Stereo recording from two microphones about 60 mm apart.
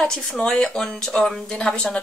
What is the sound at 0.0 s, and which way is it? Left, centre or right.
Speech, centre.